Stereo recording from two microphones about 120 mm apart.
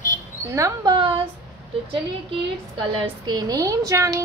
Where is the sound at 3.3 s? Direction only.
30° right (ahead or behind).